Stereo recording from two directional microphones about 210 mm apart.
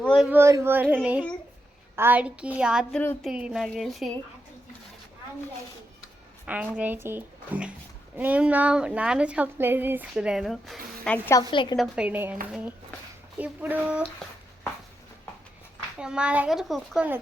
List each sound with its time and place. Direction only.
0.2 s speech: 10° right (ahead or behind)
2.0 s a child's voice: 10° right (ahead or behind)
3.0 s speech: 10° left (ahead or behind)
3.2 s a child's voice: 5° right (ahead or behind)
6.4 s speech: 5° right (ahead or behind)
11.5 s a woman's voice: 25° left (ahead or behind)
11.8 s speech: 5° right (ahead or behind)
16.0 s a child's voice: 5° right (ahead or behind)